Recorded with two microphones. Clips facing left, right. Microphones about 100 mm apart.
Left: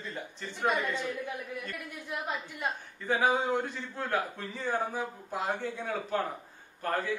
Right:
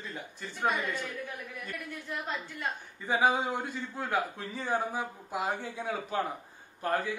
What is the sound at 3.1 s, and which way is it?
A man's voice, 15° right (ahead or behind).